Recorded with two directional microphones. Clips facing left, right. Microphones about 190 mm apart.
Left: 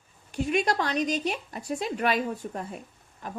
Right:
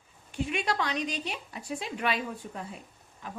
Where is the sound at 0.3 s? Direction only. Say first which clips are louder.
Left 5 dB; 40° left (ahead or behind).